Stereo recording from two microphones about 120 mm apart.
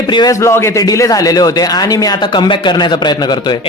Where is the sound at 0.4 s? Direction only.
25° left (ahead or behind).